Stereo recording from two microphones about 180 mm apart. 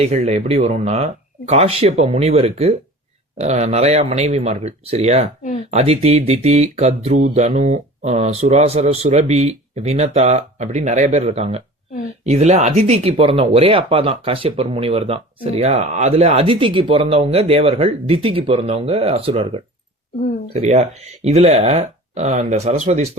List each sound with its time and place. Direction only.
0.0 s speech: 35° right (ahead or behind)